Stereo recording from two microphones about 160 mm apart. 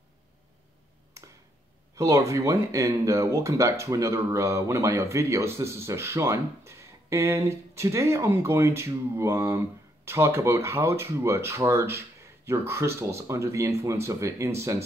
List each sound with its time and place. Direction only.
2.0 s speech: 20° right (ahead or behind)